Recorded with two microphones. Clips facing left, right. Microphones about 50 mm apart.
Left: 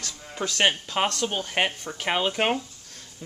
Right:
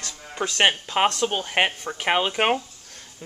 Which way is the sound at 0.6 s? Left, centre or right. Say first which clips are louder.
Right 3 dB; centre.